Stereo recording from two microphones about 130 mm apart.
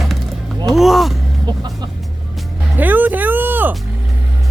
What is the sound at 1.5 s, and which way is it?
Music, 35° right (ahead or behind).